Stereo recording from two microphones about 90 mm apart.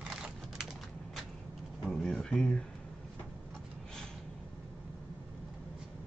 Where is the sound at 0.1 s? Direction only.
5° right (ahead or behind).